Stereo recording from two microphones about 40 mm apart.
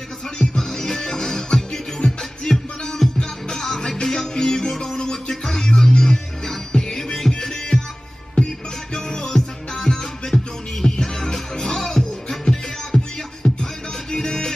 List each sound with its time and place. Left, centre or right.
0.4 s music: centre